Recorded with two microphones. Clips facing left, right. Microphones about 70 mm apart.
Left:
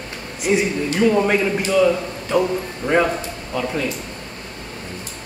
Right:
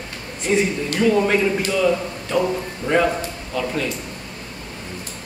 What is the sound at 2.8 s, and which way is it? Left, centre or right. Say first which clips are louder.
Speech: even; left.